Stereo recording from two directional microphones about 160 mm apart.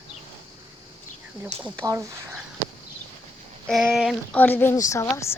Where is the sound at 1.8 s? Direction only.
20° right (ahead or behind).